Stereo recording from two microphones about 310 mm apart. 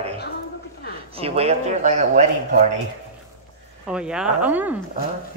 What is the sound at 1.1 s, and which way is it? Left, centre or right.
Speech, centre.